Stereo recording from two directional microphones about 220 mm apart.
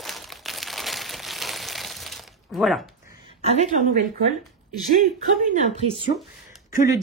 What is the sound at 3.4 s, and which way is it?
Speech, 35° right (ahead or behind).